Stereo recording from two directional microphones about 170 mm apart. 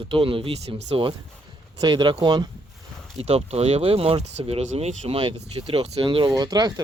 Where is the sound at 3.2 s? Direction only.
35° right (ahead or behind).